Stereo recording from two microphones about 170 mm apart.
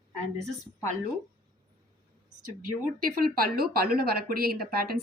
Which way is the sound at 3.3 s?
60° right (ahead or behind).